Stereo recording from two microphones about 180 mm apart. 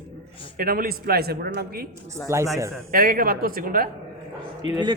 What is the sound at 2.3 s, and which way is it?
Speech, 15° right (ahead or behind).